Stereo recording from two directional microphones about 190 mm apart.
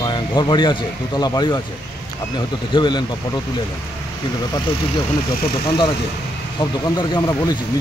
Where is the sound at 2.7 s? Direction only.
25° left (ahead or behind).